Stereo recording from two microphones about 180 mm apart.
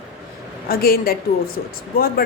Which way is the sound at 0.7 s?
55° left (ahead or behind).